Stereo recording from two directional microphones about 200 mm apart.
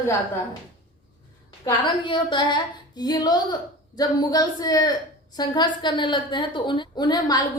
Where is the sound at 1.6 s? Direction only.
25° left (ahead or behind).